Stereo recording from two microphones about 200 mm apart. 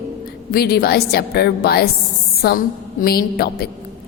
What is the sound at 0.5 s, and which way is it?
A woman's voice, 50° left (ahead or behind).